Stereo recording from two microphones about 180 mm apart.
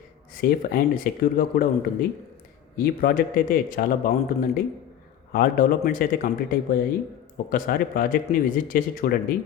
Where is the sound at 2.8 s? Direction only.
55° left (ahead or behind).